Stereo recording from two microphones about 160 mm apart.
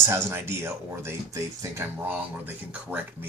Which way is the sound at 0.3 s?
15° right (ahead or behind).